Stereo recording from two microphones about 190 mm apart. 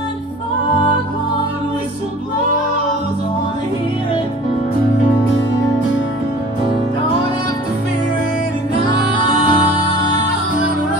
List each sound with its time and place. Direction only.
9.1 s music: 25° left (ahead or behind)